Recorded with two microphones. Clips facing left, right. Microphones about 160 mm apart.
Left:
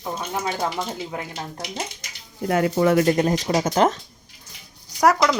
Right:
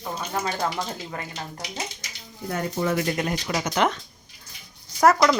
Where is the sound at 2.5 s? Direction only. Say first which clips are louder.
Left 7 dB; 90° left; by 3.0 s 75° left (ahead or behind).